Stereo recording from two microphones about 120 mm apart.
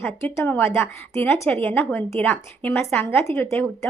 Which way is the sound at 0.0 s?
15° left (ahead or behind).